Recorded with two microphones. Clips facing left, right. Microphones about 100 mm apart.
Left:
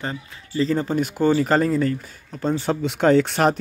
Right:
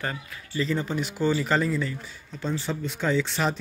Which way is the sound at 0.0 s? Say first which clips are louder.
Left 2 dB; 25° left (ahead or behind).